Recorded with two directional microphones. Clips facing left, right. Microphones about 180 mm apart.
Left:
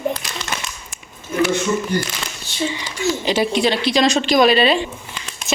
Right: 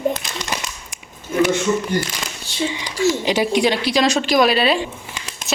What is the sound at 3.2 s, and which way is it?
Speech, 15° right (ahead or behind).